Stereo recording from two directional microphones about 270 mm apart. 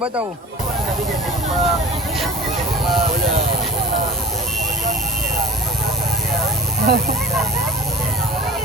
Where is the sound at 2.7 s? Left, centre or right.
Centre.